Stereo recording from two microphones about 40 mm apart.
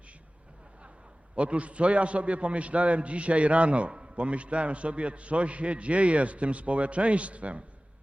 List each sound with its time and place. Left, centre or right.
1.4 s a man's voice: right